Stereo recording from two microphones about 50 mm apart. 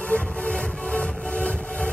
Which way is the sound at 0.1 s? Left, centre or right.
Centre.